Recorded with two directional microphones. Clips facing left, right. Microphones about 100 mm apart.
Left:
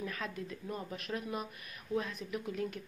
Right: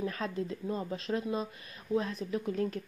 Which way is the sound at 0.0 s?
30° right (ahead or behind).